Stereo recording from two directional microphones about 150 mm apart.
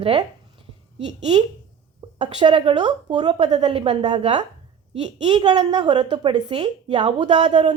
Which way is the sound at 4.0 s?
30° right (ahead or behind).